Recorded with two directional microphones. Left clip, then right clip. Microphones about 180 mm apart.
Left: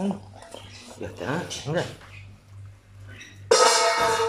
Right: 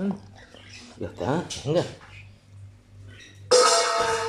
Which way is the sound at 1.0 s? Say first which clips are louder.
Right 2 dB; 20° right (ahead or behind).